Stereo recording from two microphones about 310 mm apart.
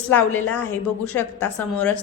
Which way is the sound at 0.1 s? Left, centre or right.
Centre.